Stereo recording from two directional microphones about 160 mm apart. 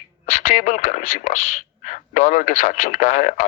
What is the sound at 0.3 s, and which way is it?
Speech, 50° left (ahead or behind).